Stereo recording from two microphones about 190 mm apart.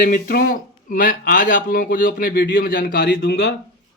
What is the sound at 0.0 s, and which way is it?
Speech, 50° left (ahead or behind).